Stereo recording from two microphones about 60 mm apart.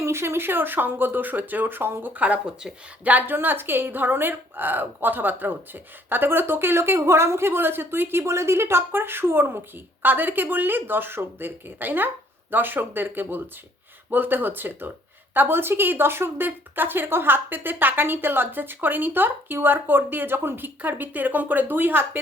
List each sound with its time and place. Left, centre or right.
0.0 s a woman's voice: right
20.8 s speech: right